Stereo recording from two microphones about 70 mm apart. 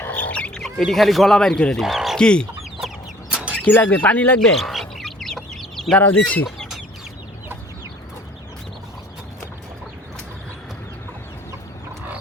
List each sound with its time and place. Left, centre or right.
0.0 s chicken: centre
0.6 s speech: centre
1.8 s bird: centre
2.1 s chicken: centre
3.2 s a sound: centre
3.5 s speech: centre
4.4 s chicken: centre
6.0 s speech: left